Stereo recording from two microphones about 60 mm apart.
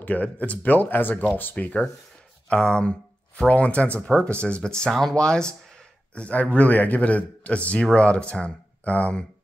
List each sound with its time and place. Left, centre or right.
0.0 s speech: left